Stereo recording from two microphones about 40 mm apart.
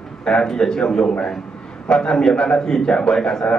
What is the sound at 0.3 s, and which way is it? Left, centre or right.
A man's voice, centre.